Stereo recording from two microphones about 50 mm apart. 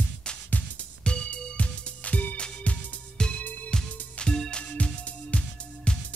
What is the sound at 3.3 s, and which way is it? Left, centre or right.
Music, left.